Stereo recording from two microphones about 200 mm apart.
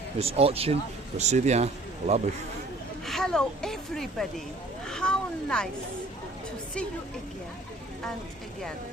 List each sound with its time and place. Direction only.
0.2 s speech: 30° right (ahead or behind)
3.1 s speech: 5° left (ahead or behind)